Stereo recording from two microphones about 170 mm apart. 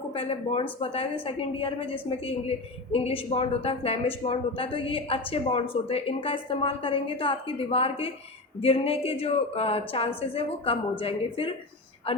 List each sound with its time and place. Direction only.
0.1 s a woman's voice: 35° left (ahead or behind)